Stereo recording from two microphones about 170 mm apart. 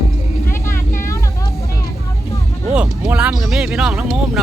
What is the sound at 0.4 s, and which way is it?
Vehicle, 15° left (ahead or behind).